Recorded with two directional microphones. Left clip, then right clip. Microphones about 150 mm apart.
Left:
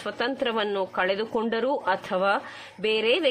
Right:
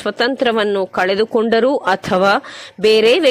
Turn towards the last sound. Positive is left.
turn(degrees=-45)  # may be behind; listen again after turning